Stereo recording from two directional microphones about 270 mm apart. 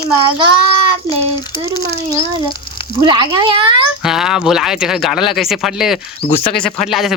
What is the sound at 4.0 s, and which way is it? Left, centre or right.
Speech, centre.